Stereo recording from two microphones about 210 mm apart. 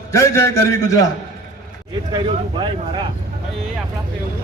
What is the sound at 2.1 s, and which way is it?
Speech, 25° right (ahead or behind).